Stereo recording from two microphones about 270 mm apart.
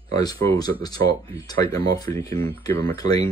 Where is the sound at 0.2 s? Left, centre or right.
Centre.